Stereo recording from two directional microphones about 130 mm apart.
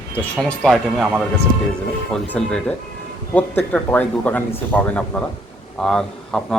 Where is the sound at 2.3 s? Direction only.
10° left (ahead or behind).